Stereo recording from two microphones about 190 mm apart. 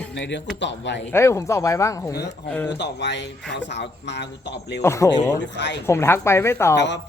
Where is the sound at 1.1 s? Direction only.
15° left (ahead or behind).